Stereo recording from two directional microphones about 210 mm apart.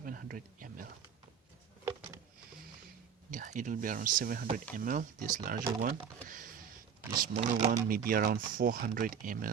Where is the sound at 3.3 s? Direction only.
40° right (ahead or behind).